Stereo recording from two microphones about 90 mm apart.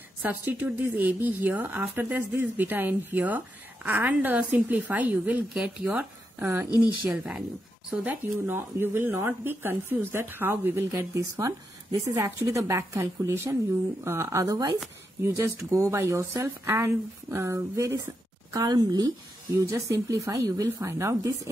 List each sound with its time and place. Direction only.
0.2 s speech: 20° right (ahead or behind)
6.8 s speech: 15° right (ahead or behind)
11.0 s speech: 35° right (ahead or behind)
18.5 s a woman's voice: 45° right (ahead or behind)
19.5 s speech: 30° right (ahead or behind)